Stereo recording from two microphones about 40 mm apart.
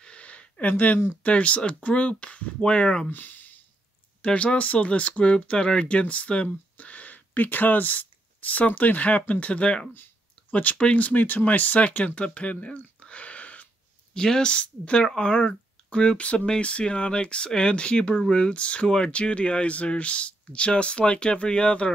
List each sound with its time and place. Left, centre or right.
0.0 s a sound: left
1.2 s speech: left
3.1 s speech: left
4.2 s speech: left
14.1 s speech: centre